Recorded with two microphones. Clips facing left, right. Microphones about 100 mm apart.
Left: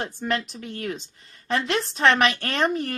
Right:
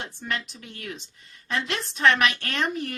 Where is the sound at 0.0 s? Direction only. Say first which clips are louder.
Left 6 dB; 40° left (ahead or behind).